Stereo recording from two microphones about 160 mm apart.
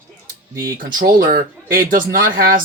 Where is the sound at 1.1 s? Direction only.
60° right (ahead or behind).